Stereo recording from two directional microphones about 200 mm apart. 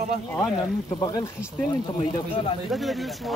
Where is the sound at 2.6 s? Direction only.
Centre (ahead or behind).